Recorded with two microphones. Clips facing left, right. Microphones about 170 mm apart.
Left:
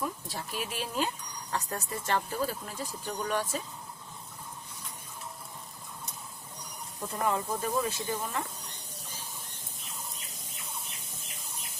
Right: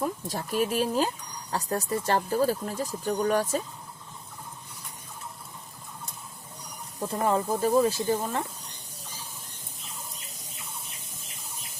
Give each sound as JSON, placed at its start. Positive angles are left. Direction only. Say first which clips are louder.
{"t": 0.0, "sound": "speech", "louder": "right 5 dB", "side_deg": -45}
{"t": 7.0, "sound": "speech", "louder": "right 5 dB", "side_deg": -30}